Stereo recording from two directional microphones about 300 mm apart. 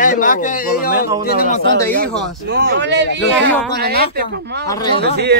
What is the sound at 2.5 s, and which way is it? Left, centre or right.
Speech, right.